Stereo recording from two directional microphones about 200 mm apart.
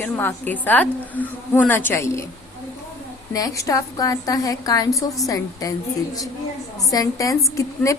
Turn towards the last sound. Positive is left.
turn(degrees=15)  # may be behind; listen again after turning